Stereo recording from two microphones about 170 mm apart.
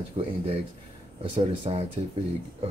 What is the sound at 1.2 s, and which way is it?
Speech, 35° right (ahead or behind).